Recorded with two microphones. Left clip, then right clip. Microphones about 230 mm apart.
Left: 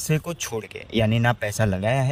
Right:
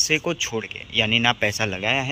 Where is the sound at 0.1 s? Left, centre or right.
Left.